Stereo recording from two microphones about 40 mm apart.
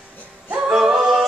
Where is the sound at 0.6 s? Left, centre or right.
Centre.